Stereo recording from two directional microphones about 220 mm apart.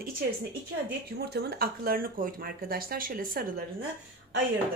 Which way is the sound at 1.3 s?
45° right (ahead or behind).